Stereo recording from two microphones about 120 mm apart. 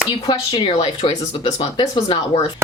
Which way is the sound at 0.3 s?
40° left (ahead or behind).